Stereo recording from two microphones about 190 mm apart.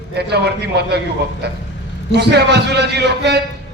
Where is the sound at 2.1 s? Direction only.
60° right (ahead or behind).